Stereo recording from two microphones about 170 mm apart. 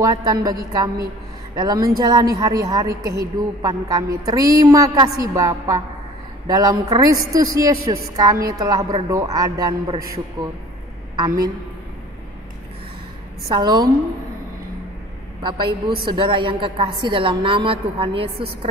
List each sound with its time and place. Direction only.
0.0 s a woman's voice: 20° right (ahead or behind)
13.5 s a woman's voice: 25° right (ahead or behind)
15.4 s a woman's voice: 25° right (ahead or behind)